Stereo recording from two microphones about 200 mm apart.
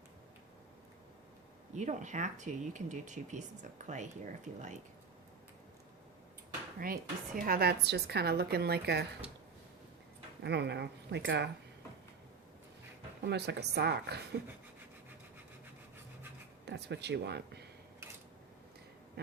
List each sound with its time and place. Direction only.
1.7 s speech: 35° right (ahead or behind)
6.7 s speech: 45° right (ahead or behind)
10.4 s speech: 60° right (ahead or behind)
13.2 s speech: 55° right (ahead or behind)
16.6 s speech: 55° right (ahead or behind)